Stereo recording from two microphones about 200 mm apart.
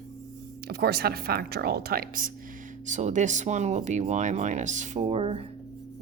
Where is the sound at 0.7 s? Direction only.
50° right (ahead or behind).